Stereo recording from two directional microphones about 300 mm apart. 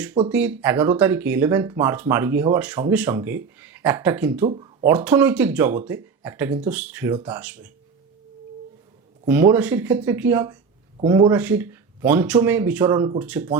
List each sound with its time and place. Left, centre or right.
0.3 s speech: centre
4.4 s speech: centre
4.9 s speech: centre
9.2 s speech: centre